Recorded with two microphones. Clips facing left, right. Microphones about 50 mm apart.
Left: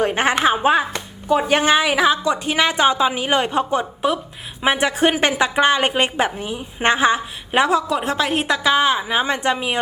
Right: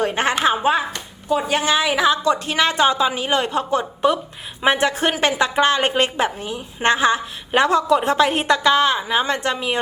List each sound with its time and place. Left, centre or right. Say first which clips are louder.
0.0 s a sound: left 2 dB; centre
0.4 s speech: left 1 dB; centre
1.3 s a woman's voice: left 3 dB; left
2.0 s speech: even; centre